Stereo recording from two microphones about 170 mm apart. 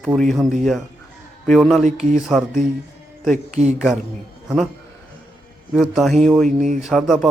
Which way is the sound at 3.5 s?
40° right (ahead or behind).